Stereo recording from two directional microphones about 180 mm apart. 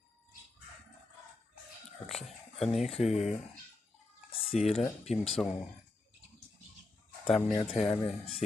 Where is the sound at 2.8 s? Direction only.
35° left (ahead or behind).